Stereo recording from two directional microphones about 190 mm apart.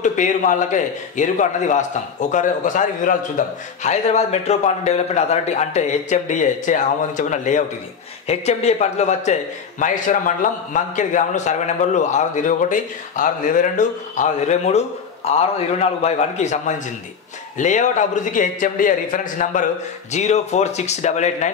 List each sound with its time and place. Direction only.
0.0 s a man's voice: 40° left (ahead or behind)